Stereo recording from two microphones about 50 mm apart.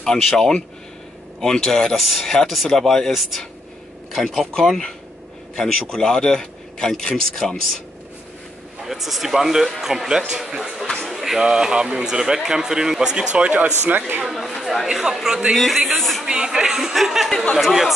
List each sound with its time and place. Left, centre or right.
0.0 s a man's voice: centre
8.8 s speech: centre
11.1 s pigeon: centre
11.3 s speech: centre
13.5 s speech: right
14.3 s speech: centre
15.5 s speech: centre
16.0 s a sound: centre
16.3 s speech: centre
17.3 s a man's voice: centre
17.6 s speech: centre